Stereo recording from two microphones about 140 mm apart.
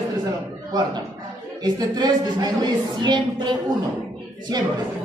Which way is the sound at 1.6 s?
30° right (ahead or behind).